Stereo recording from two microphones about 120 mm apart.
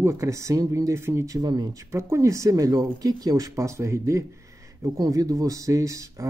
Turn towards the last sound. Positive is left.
turn(degrees=-25)  # may be behind; listen again after turning